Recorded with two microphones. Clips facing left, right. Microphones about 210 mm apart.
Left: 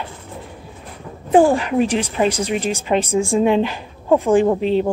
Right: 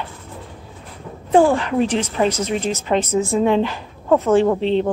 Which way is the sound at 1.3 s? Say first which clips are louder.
Left 1 dB; 15° left (ahead or behind).